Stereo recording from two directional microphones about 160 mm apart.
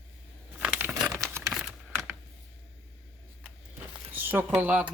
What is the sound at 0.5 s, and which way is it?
Crumpling, 5° right (ahead or behind).